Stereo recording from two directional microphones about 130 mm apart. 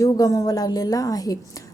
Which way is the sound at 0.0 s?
25° left (ahead or behind).